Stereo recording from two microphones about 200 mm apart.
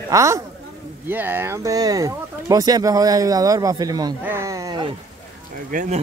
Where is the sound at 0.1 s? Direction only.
15° right (ahead or behind).